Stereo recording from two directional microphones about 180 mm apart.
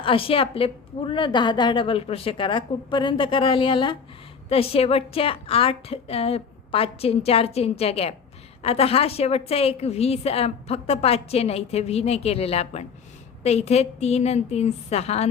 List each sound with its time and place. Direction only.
0.0 s a woman's voice: 30° left (ahead or behind)